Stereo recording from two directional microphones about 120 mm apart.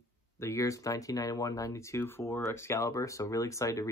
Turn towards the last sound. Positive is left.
turn(degrees=25)  # may be behind; listen again after turning